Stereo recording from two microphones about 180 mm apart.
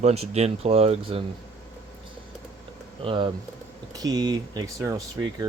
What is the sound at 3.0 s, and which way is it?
Speech, 30° right (ahead or behind).